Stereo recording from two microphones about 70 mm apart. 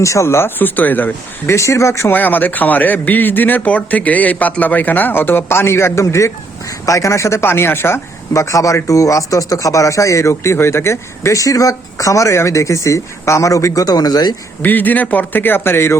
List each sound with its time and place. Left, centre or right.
0.0 s speech: left
1.5 s speech: left
2.1 s a man's voice: left
8.3 s speech: left
14.6 s a man's voice: left